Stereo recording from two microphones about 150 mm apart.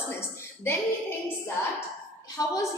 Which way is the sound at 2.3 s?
25° left (ahead or behind).